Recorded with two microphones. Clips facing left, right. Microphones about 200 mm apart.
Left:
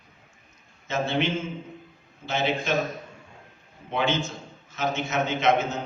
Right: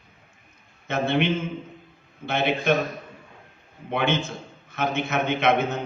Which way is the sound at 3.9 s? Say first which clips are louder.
Right 2 dB; 55° right (ahead or behind).